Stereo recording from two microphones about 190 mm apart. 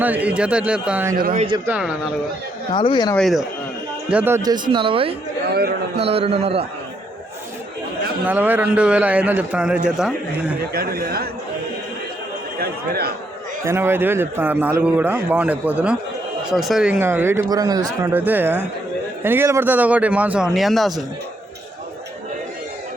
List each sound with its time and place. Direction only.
0.0 s a man's voice: 10° right (ahead or behind)
1.2 s a man's voice: 40° right (ahead or behind)
1.6 s speech: 5° right (ahead or behind)
2.7 s speech: 25° left (ahead or behind)
3.2 s speech: centre (ahead or behind)
4.1 s a man's voice: 10° right (ahead or behind); by 6.7 s 30° right (ahead or behind)
8.3 s a man's voice: 10° right (ahead or behind)
10.7 s speech: 55° right (ahead or behind)
12.5 s speech: 55° right (ahead or behind)
13.7 s a man's voice: 10° right (ahead or behind)